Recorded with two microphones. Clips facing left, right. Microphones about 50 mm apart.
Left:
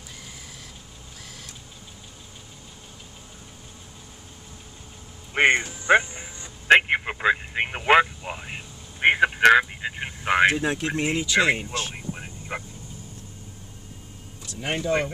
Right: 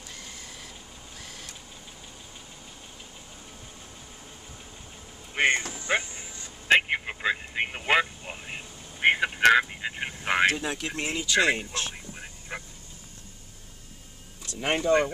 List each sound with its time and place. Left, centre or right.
5.3 s a sound: left
6.8 s vehicle: left; by 10.4 s centre
10.4 s speech: centre
12.1 s vehicle: left
14.6 s speech: centre